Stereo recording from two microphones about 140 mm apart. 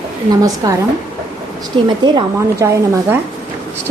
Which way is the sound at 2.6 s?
20° right (ahead or behind).